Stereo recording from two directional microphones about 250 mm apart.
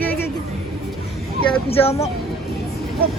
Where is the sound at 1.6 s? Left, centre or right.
Left.